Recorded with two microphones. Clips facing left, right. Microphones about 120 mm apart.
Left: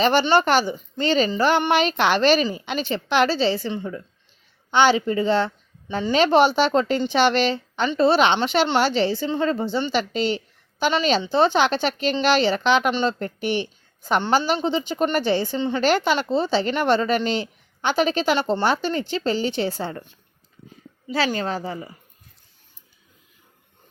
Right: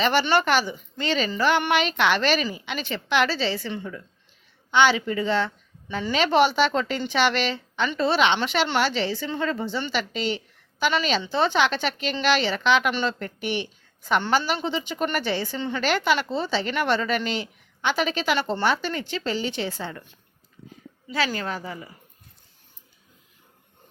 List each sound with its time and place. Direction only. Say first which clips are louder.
0.0 s a woman's voice: left 3 dB; 30° left (ahead or behind)
21.1 s a woman's voice: left 4 dB; 30° left (ahead or behind)